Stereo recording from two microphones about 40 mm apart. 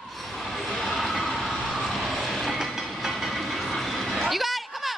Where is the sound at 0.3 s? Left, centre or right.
Centre.